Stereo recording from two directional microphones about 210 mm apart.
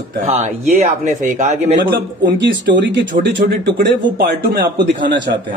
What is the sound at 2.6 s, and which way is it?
Speech, 55° right (ahead or behind).